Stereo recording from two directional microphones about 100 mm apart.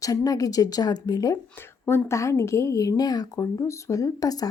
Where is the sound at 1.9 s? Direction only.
25° left (ahead or behind).